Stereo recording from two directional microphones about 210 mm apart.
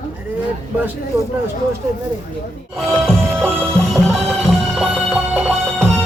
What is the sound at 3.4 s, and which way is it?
Music, 10° right (ahead or behind).